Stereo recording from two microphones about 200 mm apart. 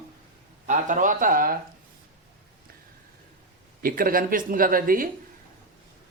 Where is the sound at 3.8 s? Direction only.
45° right (ahead or behind).